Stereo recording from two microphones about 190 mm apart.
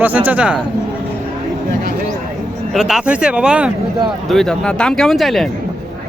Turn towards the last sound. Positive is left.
turn(degrees=0)  # may be behind; listen again after turning